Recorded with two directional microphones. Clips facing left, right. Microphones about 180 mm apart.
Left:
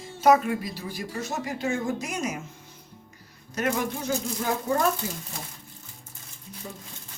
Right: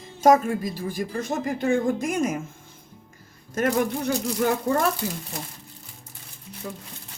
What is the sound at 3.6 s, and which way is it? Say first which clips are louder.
Speech: right 4 dB; 50° right (ahead or behind).